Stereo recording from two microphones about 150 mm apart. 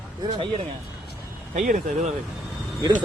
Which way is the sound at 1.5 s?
60° right (ahead or behind).